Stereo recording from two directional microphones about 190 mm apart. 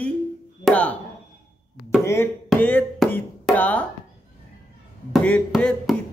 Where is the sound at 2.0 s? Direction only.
15° left (ahead or behind).